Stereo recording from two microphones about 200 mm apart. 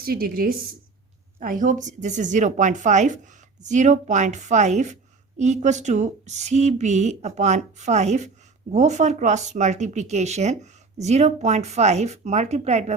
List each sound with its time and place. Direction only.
0.0 s a woman's voice: 50° right (ahead or behind)